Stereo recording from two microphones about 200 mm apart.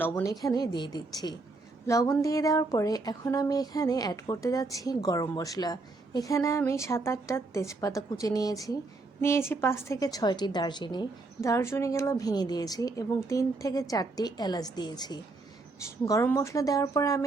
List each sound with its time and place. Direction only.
0.0 s a woman's voice: 15° left (ahead or behind)